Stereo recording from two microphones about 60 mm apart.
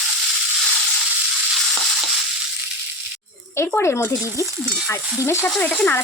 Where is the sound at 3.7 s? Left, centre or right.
Left.